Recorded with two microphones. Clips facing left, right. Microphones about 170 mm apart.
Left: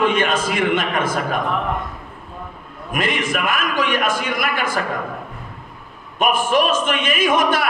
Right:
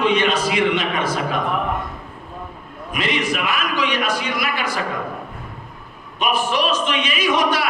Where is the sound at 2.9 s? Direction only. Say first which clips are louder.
Left 1 dB; 50° left (ahead or behind).